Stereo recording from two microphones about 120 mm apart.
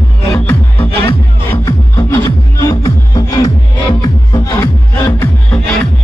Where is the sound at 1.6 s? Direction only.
25° left (ahead or behind).